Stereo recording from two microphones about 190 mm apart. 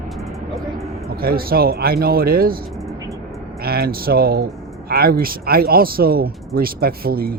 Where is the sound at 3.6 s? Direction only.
55° right (ahead or behind).